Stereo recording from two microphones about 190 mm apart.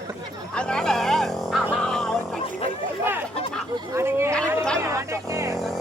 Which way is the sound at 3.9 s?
15° right (ahead or behind).